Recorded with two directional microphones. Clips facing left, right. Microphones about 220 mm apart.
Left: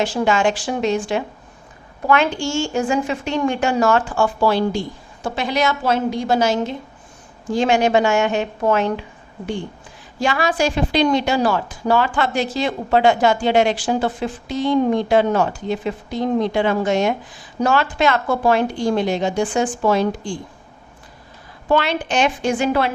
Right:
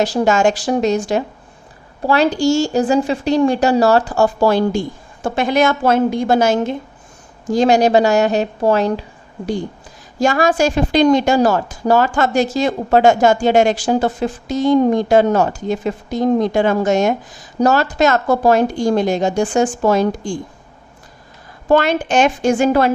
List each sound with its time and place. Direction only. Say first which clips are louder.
0.0 s a woman's voice: right 4 dB; 40° right (ahead or behind)
7.5 s a woman's voice: right 4 dB; 40° right (ahead or behind)
10.2 s a woman's voice: right 5 dB; 45° right (ahead or behind)
21.7 s a woman's voice: right 5 dB; 45° right (ahead or behind)